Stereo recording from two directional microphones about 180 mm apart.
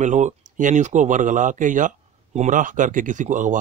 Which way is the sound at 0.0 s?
40° right (ahead or behind).